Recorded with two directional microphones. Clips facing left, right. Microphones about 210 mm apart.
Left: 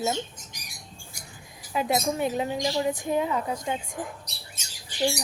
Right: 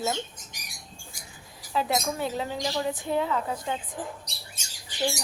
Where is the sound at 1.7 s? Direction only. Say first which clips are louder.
Left 2 dB; 15° left (ahead or behind).